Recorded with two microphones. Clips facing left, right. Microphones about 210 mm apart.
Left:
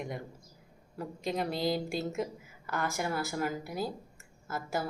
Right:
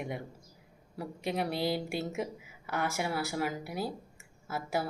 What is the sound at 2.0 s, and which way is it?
Speech, 5° right (ahead or behind).